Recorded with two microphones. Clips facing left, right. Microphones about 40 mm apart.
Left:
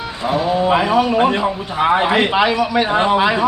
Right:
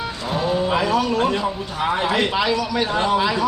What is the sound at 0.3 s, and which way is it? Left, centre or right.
A man's voice, centre.